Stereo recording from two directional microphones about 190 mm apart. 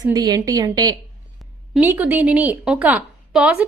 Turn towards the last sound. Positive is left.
turn(degrees=-5)  # may be behind; listen again after turning